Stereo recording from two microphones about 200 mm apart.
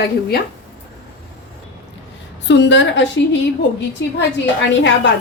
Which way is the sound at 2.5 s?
65° left (ahead or behind).